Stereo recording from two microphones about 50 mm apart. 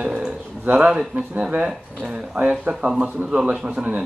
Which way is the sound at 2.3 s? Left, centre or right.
Right.